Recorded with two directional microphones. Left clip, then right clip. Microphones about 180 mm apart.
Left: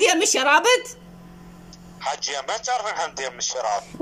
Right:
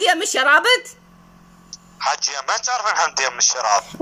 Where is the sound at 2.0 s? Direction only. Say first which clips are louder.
Right 5 dB; 20° left (ahead or behind).